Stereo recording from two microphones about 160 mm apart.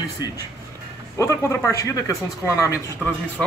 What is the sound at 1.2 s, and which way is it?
Speech, 15° left (ahead or behind).